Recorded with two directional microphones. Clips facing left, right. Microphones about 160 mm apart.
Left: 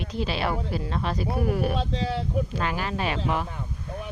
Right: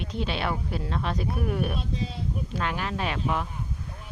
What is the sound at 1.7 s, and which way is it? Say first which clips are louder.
Speech: left 5 dB; 90° left.